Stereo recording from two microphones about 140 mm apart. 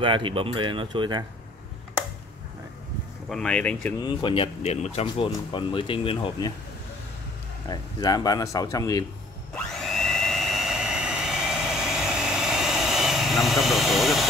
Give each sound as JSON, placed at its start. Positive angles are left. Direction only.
{"t": 0.0, "sound": "speech", "side_deg": -35}
{"t": 3.3, "sound": "speech", "side_deg": 5}
{"t": 4.0, "sound": "speech", "side_deg": 35}
{"t": 5.0, "sound": "speech", "side_deg": 35}
{"t": 7.6, "sound": "speech", "side_deg": 30}
{"t": 9.8, "sound": "jet engine", "side_deg": 0}